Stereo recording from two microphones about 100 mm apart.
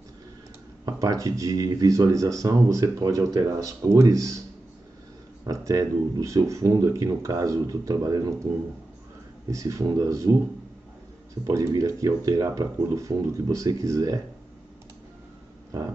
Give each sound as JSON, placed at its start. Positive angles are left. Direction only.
{"t": 0.8, "sound": "speech", "side_deg": -35}
{"t": 5.4, "sound": "speech", "side_deg": -35}
{"t": 9.5, "sound": "speech", "side_deg": -30}
{"t": 11.4, "sound": "speech", "side_deg": -35}